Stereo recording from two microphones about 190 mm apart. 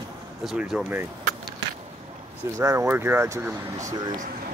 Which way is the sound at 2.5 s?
15° right (ahead or behind).